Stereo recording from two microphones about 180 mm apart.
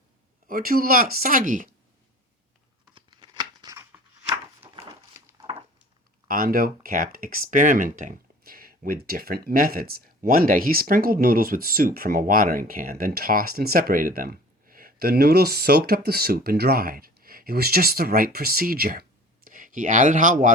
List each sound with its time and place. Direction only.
0.4 s speech: 50° right (ahead or behind)
2.9 s a sound: 25° right (ahead or behind)
6.2 s speech: 55° right (ahead or behind)